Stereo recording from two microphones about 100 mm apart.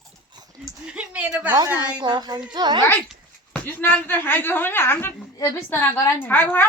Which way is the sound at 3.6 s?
20° left (ahead or behind).